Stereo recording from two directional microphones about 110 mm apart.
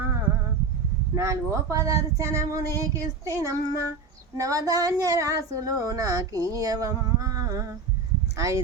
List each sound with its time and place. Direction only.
1.1 s speech: 25° right (ahead or behind)